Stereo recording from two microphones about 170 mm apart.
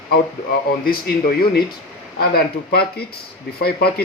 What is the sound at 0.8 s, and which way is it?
Speech, 60° left (ahead or behind).